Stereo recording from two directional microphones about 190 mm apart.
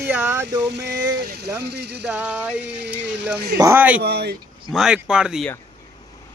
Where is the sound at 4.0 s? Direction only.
60° right (ahead or behind).